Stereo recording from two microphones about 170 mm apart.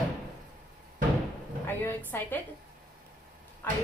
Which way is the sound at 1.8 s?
10° left (ahead or behind).